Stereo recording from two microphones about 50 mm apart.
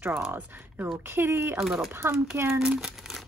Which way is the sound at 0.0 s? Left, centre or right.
Right.